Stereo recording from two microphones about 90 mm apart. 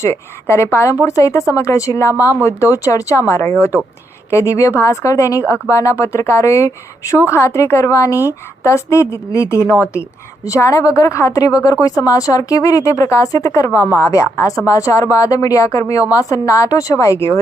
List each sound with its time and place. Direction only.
0.0 s speech: 30° left (ahead or behind)